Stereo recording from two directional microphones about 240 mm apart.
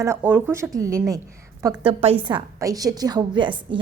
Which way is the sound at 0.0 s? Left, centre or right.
Centre.